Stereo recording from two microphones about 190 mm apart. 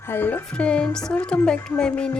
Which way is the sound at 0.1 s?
10° left (ahead or behind).